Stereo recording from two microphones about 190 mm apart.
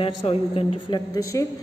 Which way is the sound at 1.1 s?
15° left (ahead or behind).